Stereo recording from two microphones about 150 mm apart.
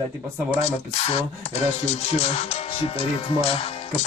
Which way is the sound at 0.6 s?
40° left (ahead or behind).